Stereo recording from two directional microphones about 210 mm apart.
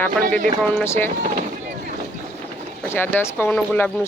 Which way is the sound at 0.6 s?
5° left (ahead or behind).